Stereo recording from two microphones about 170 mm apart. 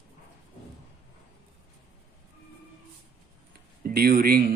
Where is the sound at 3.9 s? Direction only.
60° right (ahead or behind).